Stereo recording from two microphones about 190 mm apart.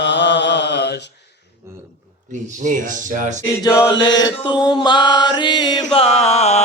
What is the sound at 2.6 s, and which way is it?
Speech, 45° right (ahead or behind).